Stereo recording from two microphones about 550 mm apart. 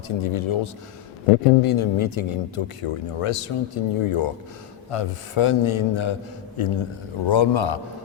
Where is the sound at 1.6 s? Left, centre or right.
Left.